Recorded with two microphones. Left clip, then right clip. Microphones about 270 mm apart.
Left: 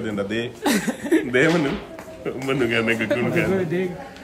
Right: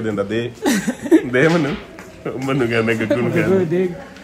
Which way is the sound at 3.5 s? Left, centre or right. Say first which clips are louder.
Right 6 dB; centre.